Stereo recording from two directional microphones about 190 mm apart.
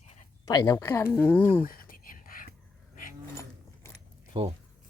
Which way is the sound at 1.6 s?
50° left (ahead or behind).